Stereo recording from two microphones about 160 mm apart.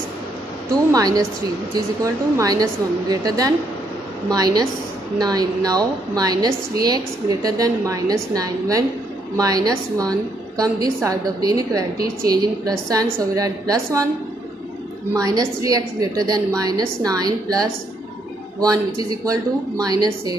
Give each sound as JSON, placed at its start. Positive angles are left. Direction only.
{"t": 0.7, "sound": "a woman's voice", "side_deg": -20}
{"t": 2.3, "sound": "a woman's voice", "side_deg": -25}
{"t": 15.1, "sound": "a woman's voice", "side_deg": -20}
{"t": 19.0, "sound": "a woman's voice", "side_deg": -25}